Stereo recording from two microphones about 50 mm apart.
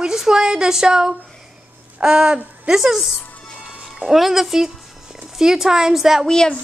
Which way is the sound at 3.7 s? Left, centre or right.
Centre.